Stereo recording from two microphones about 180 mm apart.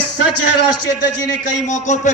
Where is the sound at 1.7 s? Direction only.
40° left (ahead or behind).